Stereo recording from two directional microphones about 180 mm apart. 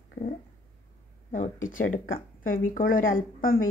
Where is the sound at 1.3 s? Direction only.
45° left (ahead or behind).